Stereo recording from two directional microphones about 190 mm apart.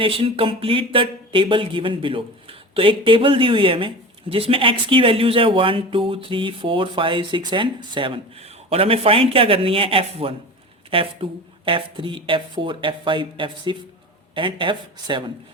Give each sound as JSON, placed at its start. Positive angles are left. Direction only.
{"t": 0.0, "sound": "speech", "side_deg": -30}